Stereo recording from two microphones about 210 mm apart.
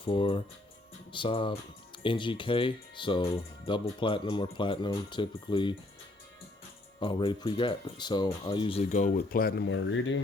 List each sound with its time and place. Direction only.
0.0 s speech: 25° left (ahead or behind)
7.0 s speech: 25° left (ahead or behind); by 9.6 s 45° left (ahead or behind)
9.6 s speech: 65° left (ahead or behind)